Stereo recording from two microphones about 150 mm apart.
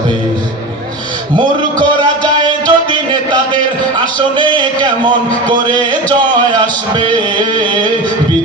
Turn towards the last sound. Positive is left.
turn(degrees=-30)  # may be behind; listen again after turning